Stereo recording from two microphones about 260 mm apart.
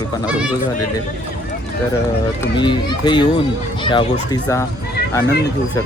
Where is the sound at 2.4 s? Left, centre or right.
Centre.